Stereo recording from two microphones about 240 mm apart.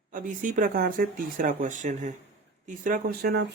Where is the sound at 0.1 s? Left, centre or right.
Right.